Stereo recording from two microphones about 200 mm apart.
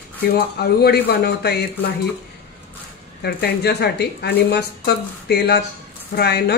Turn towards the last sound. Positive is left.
turn(degrees=55)  # may be behind; listen again after turning